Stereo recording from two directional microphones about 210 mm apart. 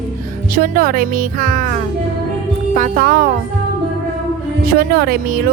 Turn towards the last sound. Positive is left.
turn(degrees=-45)  # may be behind; listen again after turning